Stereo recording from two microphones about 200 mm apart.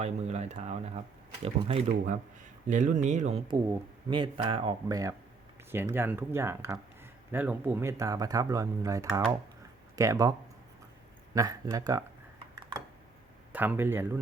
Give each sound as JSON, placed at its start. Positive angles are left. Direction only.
{"t": 0.0, "sound": "speech", "side_deg": -35}
{"t": 11.3, "sound": "speech", "side_deg": -15}
{"t": 13.5, "sound": "speech", "side_deg": -10}